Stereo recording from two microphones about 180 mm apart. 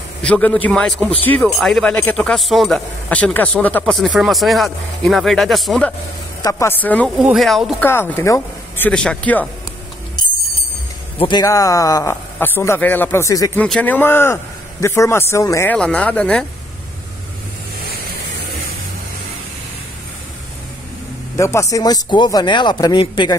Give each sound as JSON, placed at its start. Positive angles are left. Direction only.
{"t": 0.2, "sound": "a man's voice", "side_deg": 5}
{"t": 6.4, "sound": "a man's voice", "side_deg": 15}
{"t": 7.8, "sound": "a man's voice", "side_deg": 15}
{"t": 11.1, "sound": "a man's voice", "side_deg": 25}
{"t": 21.4, "sound": "speech", "side_deg": 15}